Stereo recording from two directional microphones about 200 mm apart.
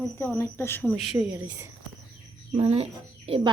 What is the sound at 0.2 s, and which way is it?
Speech, 15° left (ahead or behind).